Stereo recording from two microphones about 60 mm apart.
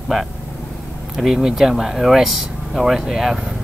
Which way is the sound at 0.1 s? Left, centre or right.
Centre.